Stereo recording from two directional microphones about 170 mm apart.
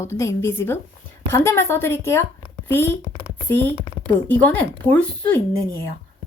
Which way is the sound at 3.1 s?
40° left (ahead or behind).